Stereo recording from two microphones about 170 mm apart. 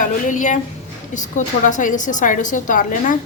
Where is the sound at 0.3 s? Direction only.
45° left (ahead or behind).